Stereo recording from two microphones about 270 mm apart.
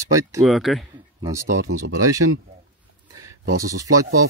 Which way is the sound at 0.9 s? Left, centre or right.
Centre.